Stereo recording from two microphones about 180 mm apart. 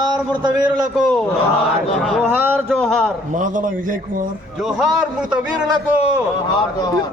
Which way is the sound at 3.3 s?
45° right (ahead or behind).